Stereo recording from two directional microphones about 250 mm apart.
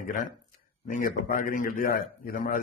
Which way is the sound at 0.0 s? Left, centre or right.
Left.